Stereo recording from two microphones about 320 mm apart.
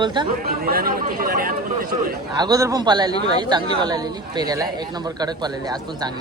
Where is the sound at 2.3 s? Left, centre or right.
Centre.